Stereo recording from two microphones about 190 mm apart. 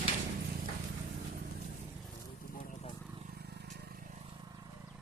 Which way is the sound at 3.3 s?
55° right (ahead or behind).